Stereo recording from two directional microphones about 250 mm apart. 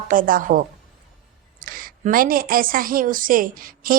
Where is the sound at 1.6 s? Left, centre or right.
Right.